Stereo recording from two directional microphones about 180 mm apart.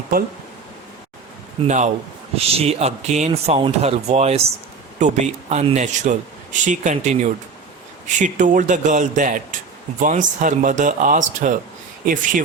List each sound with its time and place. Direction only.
1.6 s speech: 40° right (ahead or behind)